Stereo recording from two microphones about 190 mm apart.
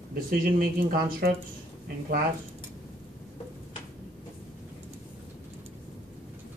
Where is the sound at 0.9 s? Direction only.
50° right (ahead or behind).